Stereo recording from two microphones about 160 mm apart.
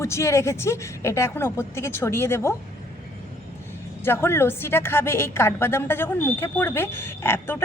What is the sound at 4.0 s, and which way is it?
A woman's voice, 15° left (ahead or behind).